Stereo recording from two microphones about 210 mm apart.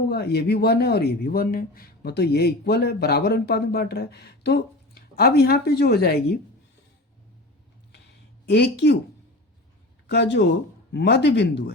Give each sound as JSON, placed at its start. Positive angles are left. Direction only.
{"t": 0.1, "sound": "speech", "side_deg": 50}
{"t": 8.4, "sound": "speech", "side_deg": 55}
{"t": 10.1, "sound": "speech", "side_deg": 55}